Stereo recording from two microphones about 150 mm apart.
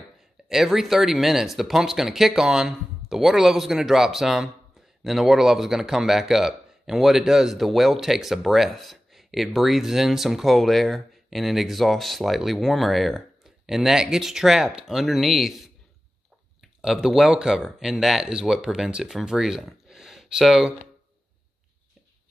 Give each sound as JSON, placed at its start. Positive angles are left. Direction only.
{"t": 0.5, "sound": "speech", "side_deg": -5}